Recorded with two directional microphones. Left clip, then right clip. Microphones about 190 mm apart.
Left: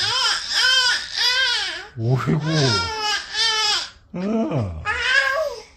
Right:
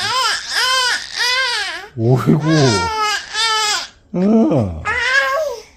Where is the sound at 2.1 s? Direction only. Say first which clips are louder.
Right 7 dB; 55° right (ahead or behind).